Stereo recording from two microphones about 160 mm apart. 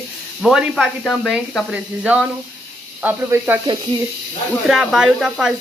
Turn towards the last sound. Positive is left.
turn(degrees=-5)  # may be behind; listen again after turning